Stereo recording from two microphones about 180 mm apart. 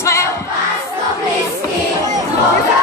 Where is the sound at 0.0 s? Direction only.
15° left (ahead or behind).